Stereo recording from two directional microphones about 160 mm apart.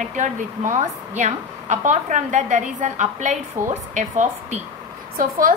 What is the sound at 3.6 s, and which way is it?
Speech, 15° right (ahead or behind).